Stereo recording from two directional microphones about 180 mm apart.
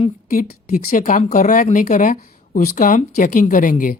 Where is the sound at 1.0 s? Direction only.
40° left (ahead or behind).